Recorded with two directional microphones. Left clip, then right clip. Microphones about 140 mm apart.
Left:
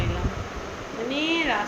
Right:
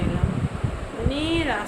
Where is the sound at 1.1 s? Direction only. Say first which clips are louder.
Left 1 dB; 25° right (ahead or behind).